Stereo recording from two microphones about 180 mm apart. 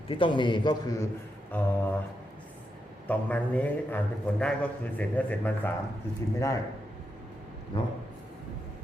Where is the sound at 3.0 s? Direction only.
10° left (ahead or behind).